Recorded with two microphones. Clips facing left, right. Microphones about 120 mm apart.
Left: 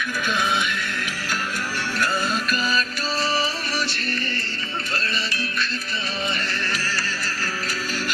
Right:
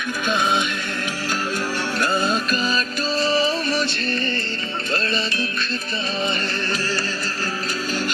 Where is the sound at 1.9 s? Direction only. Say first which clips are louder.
Right 3 dB; 20° right (ahead or behind).